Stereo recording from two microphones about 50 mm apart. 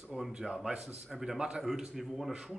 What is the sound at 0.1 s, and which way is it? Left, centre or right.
Speech, centre.